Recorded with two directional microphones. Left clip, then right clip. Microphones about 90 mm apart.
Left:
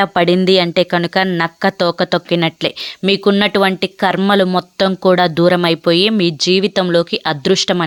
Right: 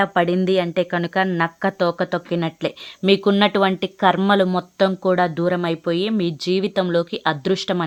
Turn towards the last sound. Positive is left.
turn(degrees=35)  # may be behind; listen again after turning